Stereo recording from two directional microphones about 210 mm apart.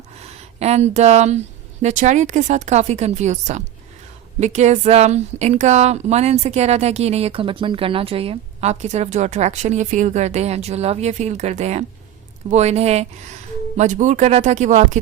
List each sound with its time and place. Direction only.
0.6 s speech: 30° right (ahead or behind)